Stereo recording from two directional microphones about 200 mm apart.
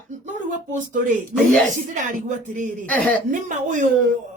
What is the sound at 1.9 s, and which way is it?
Speech, 40° right (ahead or behind).